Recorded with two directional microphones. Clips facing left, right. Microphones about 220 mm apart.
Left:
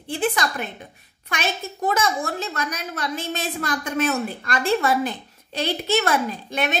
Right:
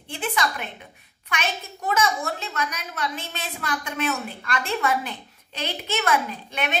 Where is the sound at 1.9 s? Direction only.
40° left (ahead or behind).